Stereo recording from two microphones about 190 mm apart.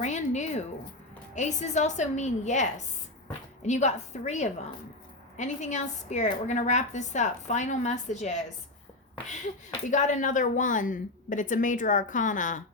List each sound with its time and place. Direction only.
0.0 s a woman's voice: 40° left (ahead or behind)
9.9 s a woman's voice: 40° left (ahead or behind)